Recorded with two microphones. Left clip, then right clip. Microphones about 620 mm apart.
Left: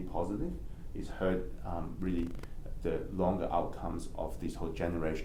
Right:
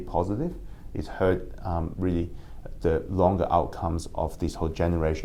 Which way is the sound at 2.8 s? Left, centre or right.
Right.